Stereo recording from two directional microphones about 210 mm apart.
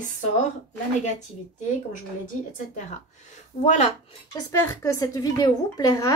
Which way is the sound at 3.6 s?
30° left (ahead or behind).